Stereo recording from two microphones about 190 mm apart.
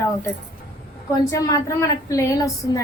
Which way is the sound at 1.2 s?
15° left (ahead or behind).